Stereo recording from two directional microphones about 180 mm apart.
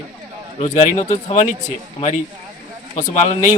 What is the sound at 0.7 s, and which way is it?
Speech, 35° left (ahead or behind).